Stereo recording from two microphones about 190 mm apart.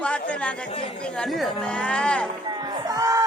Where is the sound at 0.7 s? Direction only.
30° left (ahead or behind).